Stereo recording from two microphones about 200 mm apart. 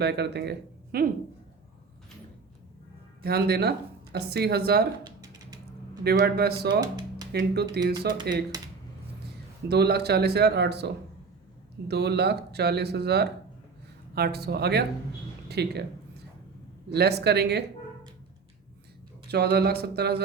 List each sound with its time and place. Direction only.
0.0 s speech: 55° right (ahead or behind)
3.2 s speech: 50° right (ahead or behind)
5.0 s a sound: 20° right (ahead or behind)
6.0 s speech: 50° right (ahead or behind)
6.7 s music: 20° right (ahead or behind)
7.3 s speech: 55° right (ahead or behind)
9.6 s speech: 55° right (ahead or behind)
16.9 s speech: 55° right (ahead or behind)
19.3 s speech: 55° right (ahead or behind)